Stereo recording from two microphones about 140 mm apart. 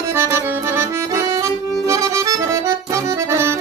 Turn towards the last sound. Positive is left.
turn(degrees=-20)  # may be behind; listen again after turning